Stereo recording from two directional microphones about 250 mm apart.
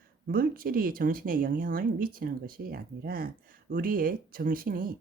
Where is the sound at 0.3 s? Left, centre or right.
Right.